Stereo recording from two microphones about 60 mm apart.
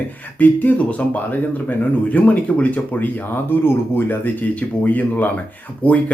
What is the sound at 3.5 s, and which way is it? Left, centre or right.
Speech, left.